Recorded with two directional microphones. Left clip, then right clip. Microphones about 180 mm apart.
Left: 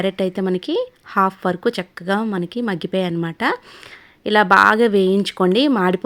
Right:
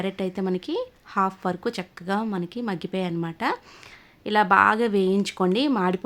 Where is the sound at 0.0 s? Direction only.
25° left (ahead or behind).